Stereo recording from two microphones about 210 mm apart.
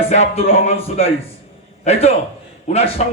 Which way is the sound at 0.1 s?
30° left (ahead or behind).